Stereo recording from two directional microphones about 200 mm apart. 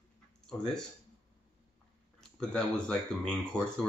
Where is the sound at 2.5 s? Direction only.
5° left (ahead or behind).